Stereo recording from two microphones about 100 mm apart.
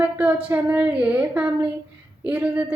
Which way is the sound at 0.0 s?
15° right (ahead or behind).